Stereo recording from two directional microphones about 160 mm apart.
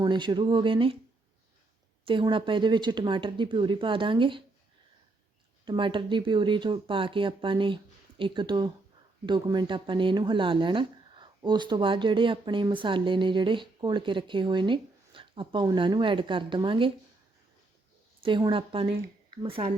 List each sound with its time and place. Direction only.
0.0 s speech: 25° right (ahead or behind)
2.0 s speech: 30° right (ahead or behind)
5.6 s speech: 30° right (ahead or behind)
18.2 s speech: 30° right (ahead or behind)